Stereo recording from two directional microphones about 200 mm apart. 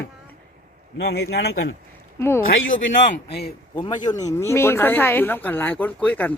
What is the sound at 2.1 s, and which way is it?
Speech, 10° left (ahead or behind).